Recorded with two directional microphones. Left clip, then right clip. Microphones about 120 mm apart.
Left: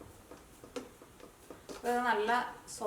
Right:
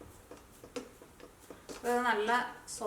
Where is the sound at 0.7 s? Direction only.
Centre (ahead or behind).